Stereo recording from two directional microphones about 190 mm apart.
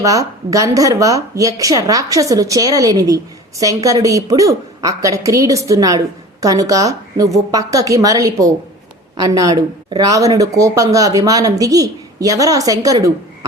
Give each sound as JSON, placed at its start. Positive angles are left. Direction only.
{"t": 0.0, "sound": "a woman's voice", "side_deg": -15}